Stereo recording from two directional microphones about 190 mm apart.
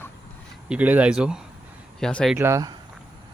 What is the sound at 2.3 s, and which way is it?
Speech, 15° right (ahead or behind).